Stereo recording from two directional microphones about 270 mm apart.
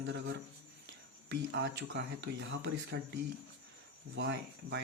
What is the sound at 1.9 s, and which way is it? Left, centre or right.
Speech, right.